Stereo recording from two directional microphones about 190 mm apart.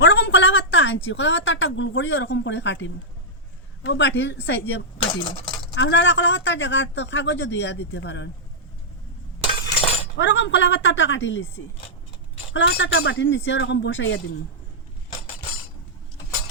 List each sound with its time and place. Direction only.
0.0 s a sound: 70° left (ahead or behind)
1.0 s speech: 75° left (ahead or behind)
9.8 s chink: 30° left (ahead or behind)
10.2 s speech: 75° left (ahead or behind)
12.5 s speech: 75° left (ahead or behind)